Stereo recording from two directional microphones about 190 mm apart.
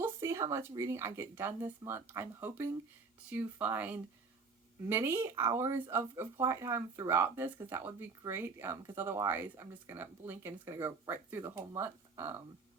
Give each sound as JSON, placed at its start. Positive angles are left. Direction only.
{"t": 0.0, "sound": "speech", "side_deg": -15}